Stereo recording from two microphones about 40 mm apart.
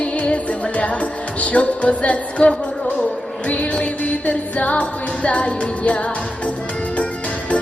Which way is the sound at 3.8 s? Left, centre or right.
Left.